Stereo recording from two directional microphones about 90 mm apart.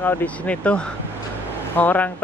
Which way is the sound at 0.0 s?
15° left (ahead or behind).